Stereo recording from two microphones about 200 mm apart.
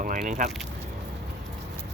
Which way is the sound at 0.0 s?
40° right (ahead or behind).